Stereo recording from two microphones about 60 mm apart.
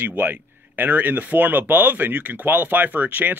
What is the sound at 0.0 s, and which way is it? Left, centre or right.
Speech, right.